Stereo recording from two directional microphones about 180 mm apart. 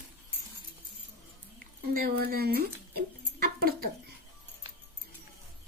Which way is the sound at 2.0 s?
60° right (ahead or behind).